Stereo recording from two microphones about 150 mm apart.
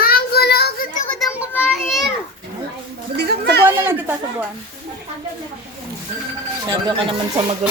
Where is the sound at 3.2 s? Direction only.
90° right.